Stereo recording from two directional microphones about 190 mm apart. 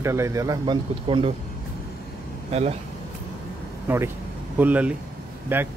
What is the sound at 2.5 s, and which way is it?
Speech, 35° right (ahead or behind).